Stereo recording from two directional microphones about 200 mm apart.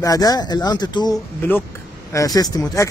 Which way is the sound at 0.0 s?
20° left (ahead or behind).